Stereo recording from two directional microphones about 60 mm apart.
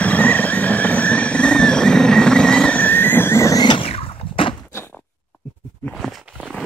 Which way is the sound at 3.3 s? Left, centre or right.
Left.